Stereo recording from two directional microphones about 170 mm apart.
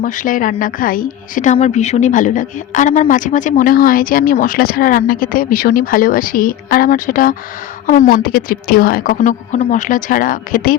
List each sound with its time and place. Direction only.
0.0 s a woman's voice: 55° left (ahead or behind)